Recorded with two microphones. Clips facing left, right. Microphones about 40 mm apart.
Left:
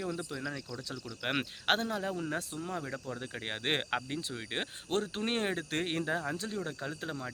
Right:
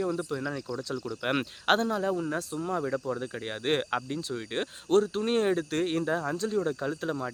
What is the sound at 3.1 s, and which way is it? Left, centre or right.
Speech, centre.